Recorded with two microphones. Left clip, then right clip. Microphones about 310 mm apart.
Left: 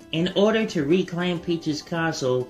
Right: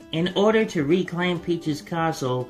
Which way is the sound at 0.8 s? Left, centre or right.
Centre.